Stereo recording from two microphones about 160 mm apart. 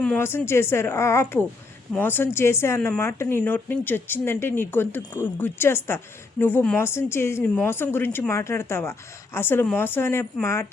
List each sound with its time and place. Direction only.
0.0 s a woman's voice: 10° left (ahead or behind)